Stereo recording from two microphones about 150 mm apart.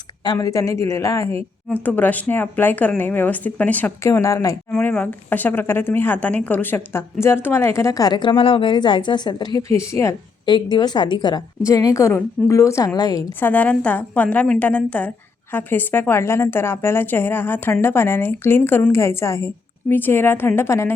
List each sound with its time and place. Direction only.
0.3 s a woman's voice: 20° left (ahead or behind)
4.7 s speech: 10° left (ahead or behind); by 13.2 s 25° left (ahead or behind)
13.4 s a woman's voice: 10° left (ahead or behind)